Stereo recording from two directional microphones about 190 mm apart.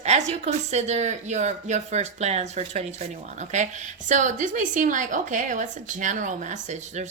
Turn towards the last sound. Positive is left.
turn(degrees=-40)  # may be behind; listen again after turning